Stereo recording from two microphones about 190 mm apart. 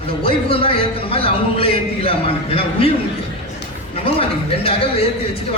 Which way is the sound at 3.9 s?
30° left (ahead or behind).